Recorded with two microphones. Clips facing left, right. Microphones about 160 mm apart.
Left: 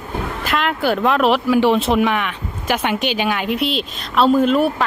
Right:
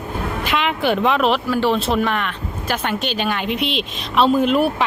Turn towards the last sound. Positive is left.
turn(degrees=0)  # may be behind; listen again after turning